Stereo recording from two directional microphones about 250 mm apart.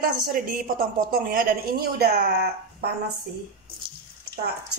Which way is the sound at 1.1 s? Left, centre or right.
Right.